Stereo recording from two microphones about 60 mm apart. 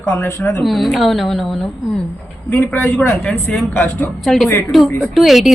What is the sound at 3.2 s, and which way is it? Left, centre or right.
Speech, centre.